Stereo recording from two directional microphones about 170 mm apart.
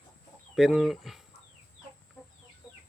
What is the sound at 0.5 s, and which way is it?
Speech, centre (ahead or behind).